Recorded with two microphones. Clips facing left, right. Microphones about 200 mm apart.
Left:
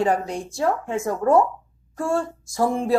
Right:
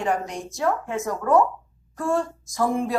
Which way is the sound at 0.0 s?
30° left (ahead or behind).